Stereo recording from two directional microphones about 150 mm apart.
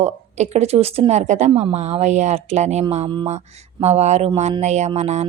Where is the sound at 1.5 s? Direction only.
35° right (ahead or behind).